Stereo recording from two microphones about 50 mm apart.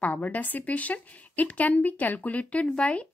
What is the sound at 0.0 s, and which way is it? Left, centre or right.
A woman's voice, left.